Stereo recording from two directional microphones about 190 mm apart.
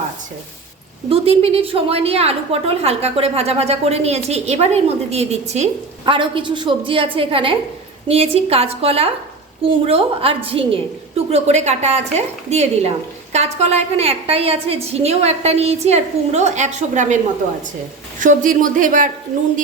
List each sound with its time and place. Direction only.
1.1 s a woman's voice: 30° right (ahead or behind)
18.2 s a woman's voice: 45° right (ahead or behind)